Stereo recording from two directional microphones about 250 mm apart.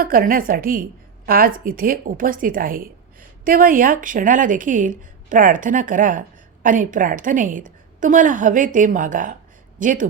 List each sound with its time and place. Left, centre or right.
0.0 s a woman's voice: right